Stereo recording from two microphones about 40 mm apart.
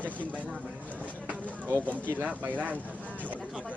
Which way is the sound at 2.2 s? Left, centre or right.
Right.